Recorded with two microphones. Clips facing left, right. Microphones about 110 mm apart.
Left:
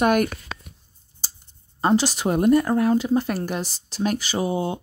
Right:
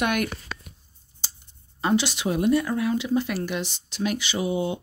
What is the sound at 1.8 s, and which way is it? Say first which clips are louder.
Speech: left 3 dB; 40° left (ahead or behind).